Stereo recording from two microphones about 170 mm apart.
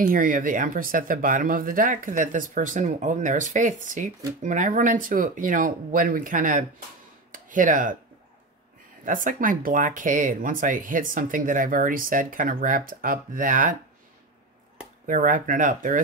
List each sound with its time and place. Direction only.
0.0 s speech: 55° right (ahead or behind)
9.0 s speech: 50° right (ahead or behind)
15.0 s speech: 50° right (ahead or behind)